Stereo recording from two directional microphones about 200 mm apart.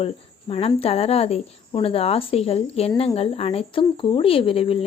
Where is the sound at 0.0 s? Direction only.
30° left (ahead or behind).